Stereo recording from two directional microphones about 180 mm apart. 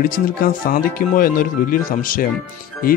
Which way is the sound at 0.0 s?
50° left (ahead or behind).